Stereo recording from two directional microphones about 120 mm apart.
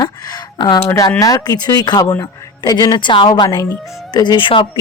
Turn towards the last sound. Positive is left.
turn(degrees=45)  # may be behind; listen again after turning